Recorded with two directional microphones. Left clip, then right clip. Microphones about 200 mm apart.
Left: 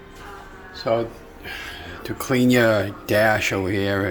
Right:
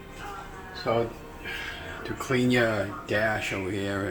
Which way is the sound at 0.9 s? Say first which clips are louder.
Left 5 dB; 55° left (ahead or behind).